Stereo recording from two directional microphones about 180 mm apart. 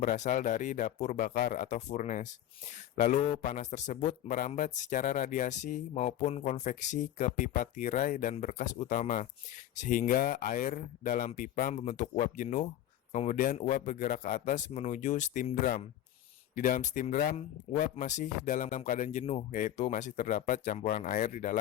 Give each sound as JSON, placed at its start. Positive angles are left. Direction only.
{"t": 0.0, "sound": "speech", "side_deg": 45}
{"t": 17.3, "sound": "speech", "side_deg": 40}